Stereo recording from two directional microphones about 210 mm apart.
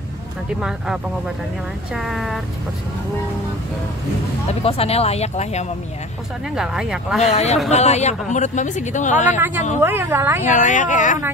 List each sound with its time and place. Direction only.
0.6 s speech: 5° right (ahead or behind)
4.5 s speech: 30° left (ahead or behind)
6.5 s speech: centre (ahead or behind)
7.2 s speech: 30° left (ahead or behind)
9.8 s a woman's voice: 10° right (ahead or behind)
10.4 s speech: 35° left (ahead or behind)